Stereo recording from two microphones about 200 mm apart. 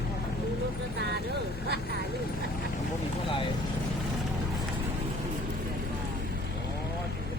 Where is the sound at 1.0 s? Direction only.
55° right (ahead or behind).